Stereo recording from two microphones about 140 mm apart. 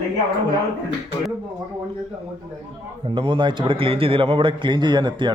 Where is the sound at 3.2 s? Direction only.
35° right (ahead or behind).